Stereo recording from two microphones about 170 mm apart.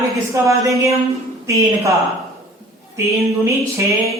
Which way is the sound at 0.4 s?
20° right (ahead or behind).